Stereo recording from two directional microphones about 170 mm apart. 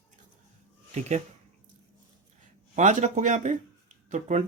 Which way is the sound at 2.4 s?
45° right (ahead or behind).